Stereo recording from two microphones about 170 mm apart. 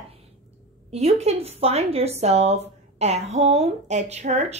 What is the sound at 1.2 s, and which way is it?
Speech, 40° right (ahead or behind).